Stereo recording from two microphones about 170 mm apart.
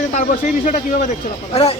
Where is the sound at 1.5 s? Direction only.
35° left (ahead or behind).